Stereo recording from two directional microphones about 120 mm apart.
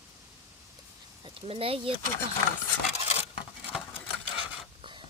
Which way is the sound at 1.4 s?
50° right (ahead or behind).